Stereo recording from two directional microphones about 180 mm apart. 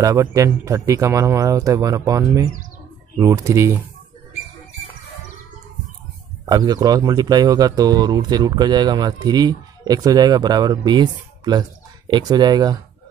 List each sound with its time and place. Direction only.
0.0 s speech: 20° right (ahead or behind)
6.4 s speech: 20° right (ahead or behind)